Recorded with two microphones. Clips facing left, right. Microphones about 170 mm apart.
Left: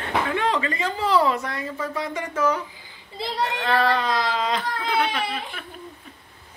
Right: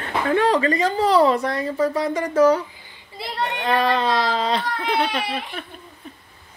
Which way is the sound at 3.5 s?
15° right (ahead or behind).